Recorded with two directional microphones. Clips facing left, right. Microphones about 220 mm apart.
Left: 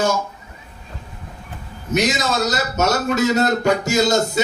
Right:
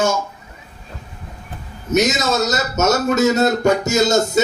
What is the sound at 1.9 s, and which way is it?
A man's voice, 45° right (ahead or behind).